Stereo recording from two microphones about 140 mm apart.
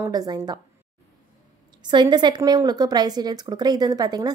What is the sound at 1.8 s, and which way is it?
A woman's voice, 30° right (ahead or behind).